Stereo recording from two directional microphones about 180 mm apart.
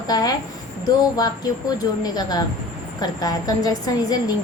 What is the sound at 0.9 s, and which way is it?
A woman's voice, 20° left (ahead or behind).